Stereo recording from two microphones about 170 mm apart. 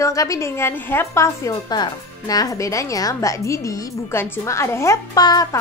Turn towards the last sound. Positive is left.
turn(degrees=20)  # may be behind; listen again after turning